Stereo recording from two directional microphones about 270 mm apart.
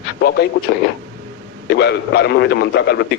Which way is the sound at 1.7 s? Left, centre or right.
Left.